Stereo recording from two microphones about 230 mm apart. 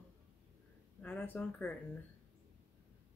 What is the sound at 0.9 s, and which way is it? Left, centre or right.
Speech, centre.